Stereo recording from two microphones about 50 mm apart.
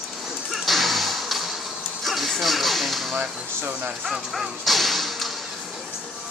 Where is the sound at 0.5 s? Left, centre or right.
Centre.